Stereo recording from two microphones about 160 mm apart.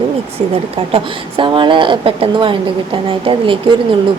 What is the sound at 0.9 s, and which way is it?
Speech, 30° right (ahead or behind).